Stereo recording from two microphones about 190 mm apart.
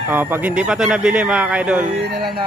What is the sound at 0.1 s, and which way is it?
Speech, 10° right (ahead or behind).